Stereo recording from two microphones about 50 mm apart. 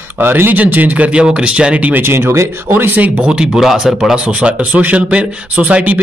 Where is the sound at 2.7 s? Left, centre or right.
Right.